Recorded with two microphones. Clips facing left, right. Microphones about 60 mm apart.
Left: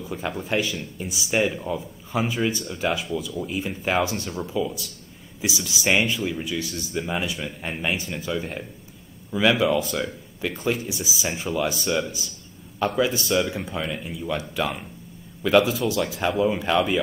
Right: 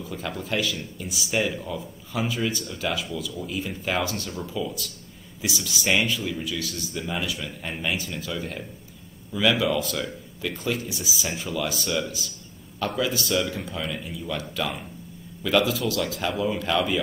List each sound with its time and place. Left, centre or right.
0.0 s speech: centre